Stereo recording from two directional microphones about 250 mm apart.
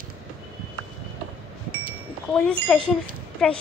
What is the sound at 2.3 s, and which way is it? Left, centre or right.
Speech, centre.